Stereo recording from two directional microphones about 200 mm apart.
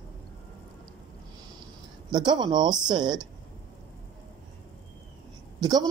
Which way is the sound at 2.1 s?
20° right (ahead or behind).